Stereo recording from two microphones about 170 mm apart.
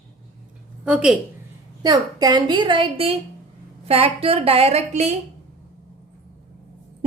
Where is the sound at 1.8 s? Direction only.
25° right (ahead or behind); by 5.2 s 40° right (ahead or behind).